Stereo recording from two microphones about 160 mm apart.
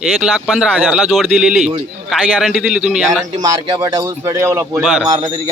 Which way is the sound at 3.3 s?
25° right (ahead or behind).